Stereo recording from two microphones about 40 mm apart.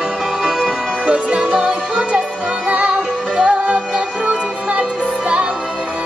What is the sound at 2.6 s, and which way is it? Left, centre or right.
Music, right.